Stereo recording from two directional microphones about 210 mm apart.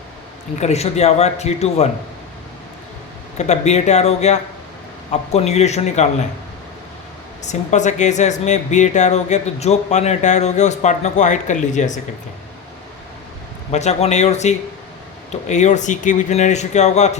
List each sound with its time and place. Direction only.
0.6 s speech: 30° left (ahead or behind)
3.3 s speech: 35° left (ahead or behind)
7.4 s speech: 35° left (ahead or behind)
13.7 s speech: 30° left (ahead or behind)